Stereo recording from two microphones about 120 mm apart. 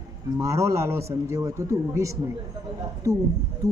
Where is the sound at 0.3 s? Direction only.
25° right (ahead or behind).